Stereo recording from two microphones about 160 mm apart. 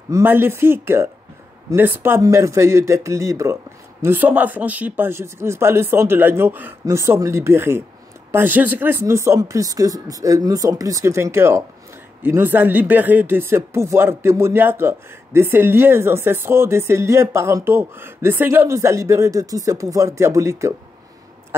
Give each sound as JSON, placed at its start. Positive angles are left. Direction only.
{"t": 0.1, "sound": "speech", "side_deg": -15}